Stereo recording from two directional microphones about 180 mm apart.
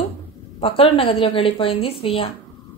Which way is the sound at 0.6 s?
30° left (ahead or behind).